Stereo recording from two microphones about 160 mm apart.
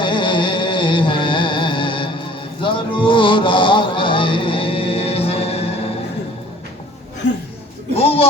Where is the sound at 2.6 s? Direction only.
30° left (ahead or behind).